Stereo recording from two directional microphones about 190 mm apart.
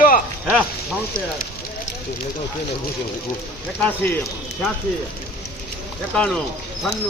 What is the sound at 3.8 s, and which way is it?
Speech, 10° left (ahead or behind).